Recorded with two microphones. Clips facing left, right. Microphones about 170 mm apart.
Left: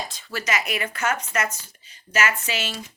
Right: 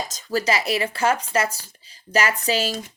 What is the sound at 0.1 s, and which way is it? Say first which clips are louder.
A woman's voice: right 5 dB; 40° right (ahead or behind).